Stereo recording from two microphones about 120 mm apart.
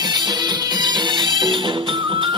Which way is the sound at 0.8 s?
40° right (ahead or behind).